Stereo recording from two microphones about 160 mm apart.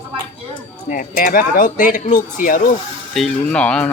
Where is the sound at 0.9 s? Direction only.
60° left (ahead or behind).